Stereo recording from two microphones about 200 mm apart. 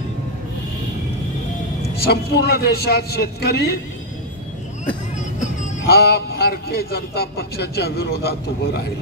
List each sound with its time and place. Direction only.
2.0 s a man's voice: 55° left (ahead or behind)
5.1 s music: 35° left (ahead or behind)
5.9 s a man's voice: 50° left (ahead or behind)